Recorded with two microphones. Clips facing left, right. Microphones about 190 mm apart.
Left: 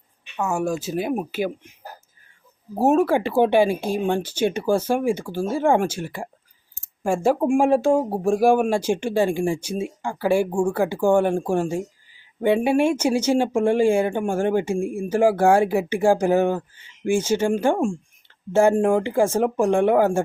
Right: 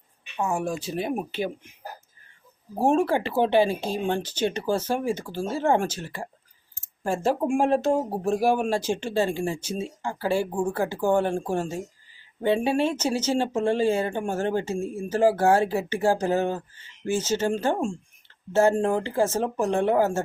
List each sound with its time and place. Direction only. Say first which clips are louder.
0.5 s speech: left 6 dB; centre (ahead or behind)
2.7 s speech: left 4 dB; 5° left (ahead or behind)